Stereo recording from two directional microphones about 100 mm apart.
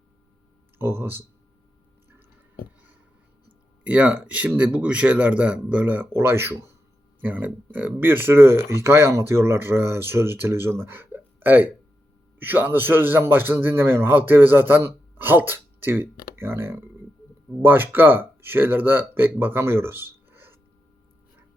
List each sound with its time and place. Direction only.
0.8 s a man's voice: 25° right (ahead or behind)
3.8 s a man's voice: 15° right (ahead or behind)